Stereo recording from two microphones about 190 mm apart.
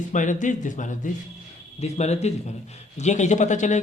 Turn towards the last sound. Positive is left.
turn(degrees=40)  # may be behind; listen again after turning